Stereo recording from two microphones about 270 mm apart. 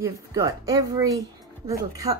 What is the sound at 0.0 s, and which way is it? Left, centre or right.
Speech, centre.